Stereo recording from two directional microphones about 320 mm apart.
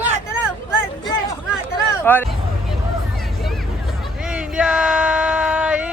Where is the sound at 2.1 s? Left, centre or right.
Centre.